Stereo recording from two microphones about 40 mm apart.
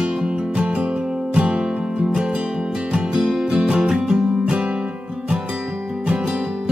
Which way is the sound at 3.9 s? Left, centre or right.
Centre.